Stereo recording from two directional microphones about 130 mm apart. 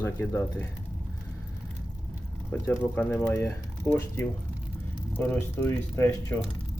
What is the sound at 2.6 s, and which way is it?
Speech, 15° left (ahead or behind).